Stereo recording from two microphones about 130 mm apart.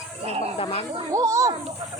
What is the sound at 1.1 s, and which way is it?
Speech, 25° right (ahead or behind).